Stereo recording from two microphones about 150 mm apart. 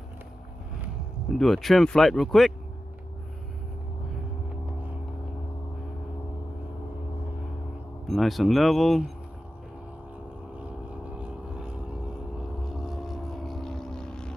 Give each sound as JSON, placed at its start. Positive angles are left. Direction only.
{"t": 1.4, "sound": "speech", "side_deg": 0}
{"t": 8.1, "sound": "speech", "side_deg": 0}
{"t": 11.1, "sound": "vehicle", "side_deg": -5}
{"t": 12.6, "sound": "boat", "side_deg": 0}